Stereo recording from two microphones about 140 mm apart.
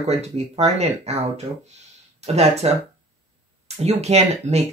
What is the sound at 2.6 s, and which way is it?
Speech, 50° right (ahead or behind).